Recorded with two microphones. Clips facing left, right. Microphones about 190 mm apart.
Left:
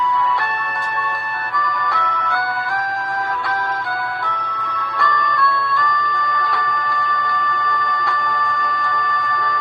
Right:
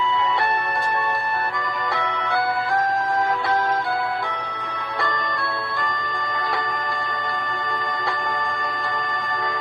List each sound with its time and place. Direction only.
1.6 s music: 30° right (ahead or behind)
4.9 s music: 20° right (ahead or behind)